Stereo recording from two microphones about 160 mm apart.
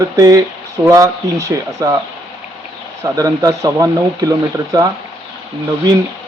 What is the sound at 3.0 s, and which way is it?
Speech, 20° right (ahead or behind).